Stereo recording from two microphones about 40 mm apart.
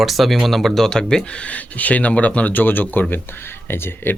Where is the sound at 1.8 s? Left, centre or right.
Left.